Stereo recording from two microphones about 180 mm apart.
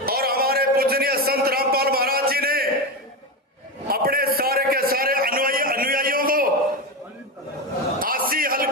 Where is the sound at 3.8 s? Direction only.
55° right (ahead or behind).